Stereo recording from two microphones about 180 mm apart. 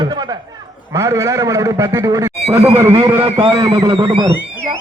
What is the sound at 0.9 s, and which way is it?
A man's voice, 15° right (ahead or behind).